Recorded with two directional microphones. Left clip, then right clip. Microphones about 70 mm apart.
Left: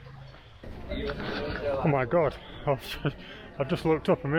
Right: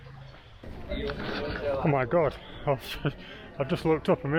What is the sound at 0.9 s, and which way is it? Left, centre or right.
Speech, right.